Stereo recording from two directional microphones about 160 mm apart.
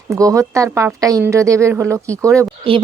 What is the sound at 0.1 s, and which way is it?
Speech, 20° right (ahead or behind).